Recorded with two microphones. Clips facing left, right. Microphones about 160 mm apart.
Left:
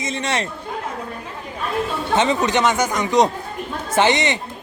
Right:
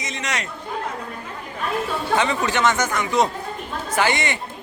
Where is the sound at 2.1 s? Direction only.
20° left (ahead or behind).